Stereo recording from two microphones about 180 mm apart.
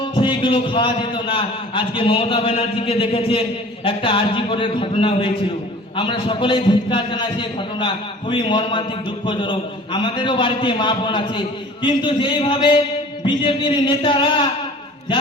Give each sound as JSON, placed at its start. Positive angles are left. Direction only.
{"t": 0.1, "sound": "a man's voice", "side_deg": 25}